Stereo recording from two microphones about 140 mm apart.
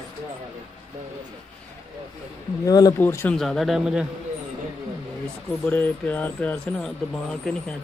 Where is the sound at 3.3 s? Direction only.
Centre (ahead or behind).